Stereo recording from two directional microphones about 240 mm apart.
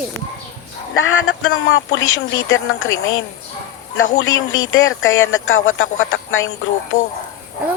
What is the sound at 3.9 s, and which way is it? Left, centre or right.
Speech, left.